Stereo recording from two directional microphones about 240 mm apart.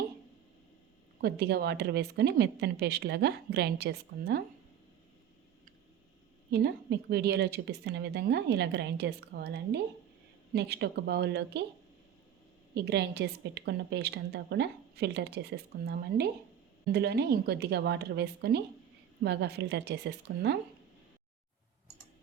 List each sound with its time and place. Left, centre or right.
1.2 s a woman's voice: right
6.5 s a woman's voice: right
12.7 s a woman's voice: right